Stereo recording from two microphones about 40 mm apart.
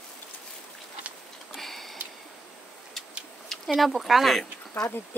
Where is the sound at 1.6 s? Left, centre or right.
Centre.